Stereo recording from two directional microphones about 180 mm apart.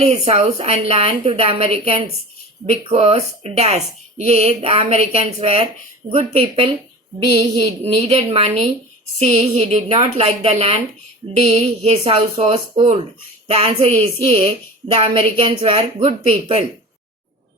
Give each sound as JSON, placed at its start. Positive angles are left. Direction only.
{"t": 0.0, "sound": "a woman's voice", "side_deg": -40}